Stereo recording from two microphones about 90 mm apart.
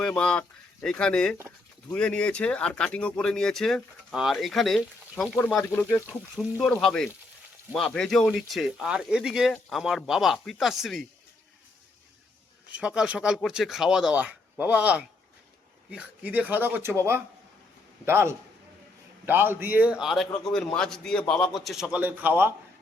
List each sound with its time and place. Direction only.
0.0 s a man's voice: 10° left (ahead or behind); by 9.5 s 5° right (ahead or behind)
9.5 s a man's voice: 5° left (ahead or behind)
12.6 s speech: 15° right (ahead or behind)
18.0 s speech: 30° right (ahead or behind); by 20.1 s 15° right (ahead or behind)
20.1 s a man's voice: 5° left (ahead or behind)
22.0 s speech: 20° right (ahead or behind)